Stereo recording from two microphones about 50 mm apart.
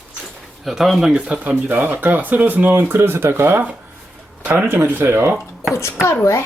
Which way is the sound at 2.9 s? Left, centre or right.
Right.